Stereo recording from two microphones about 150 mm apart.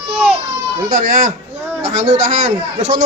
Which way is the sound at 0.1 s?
5° right (ahead or behind).